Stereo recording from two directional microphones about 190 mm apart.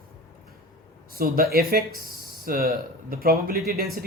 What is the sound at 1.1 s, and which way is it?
Speech, 50° right (ahead or behind).